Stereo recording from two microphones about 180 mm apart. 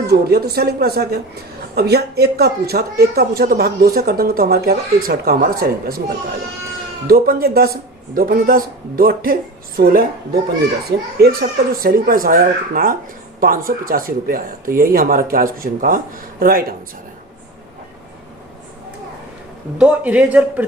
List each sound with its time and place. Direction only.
0.1 s speech: 60° right (ahead or behind)
7.1 s speech: 55° right (ahead or behind)
11.2 s speech: 55° right (ahead or behind)
19.8 s speech: 5° right (ahead or behind)